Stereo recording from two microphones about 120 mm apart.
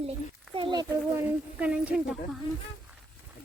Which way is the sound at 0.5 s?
40° right (ahead or behind).